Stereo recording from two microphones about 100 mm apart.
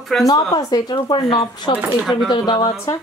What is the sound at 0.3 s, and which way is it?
Speech, 40° left (ahead or behind).